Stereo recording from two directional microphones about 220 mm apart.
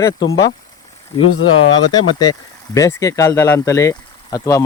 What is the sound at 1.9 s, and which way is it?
Speech, 20° left (ahead or behind).